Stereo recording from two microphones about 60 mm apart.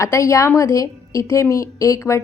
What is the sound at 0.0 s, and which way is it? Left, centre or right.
A woman's voice, left.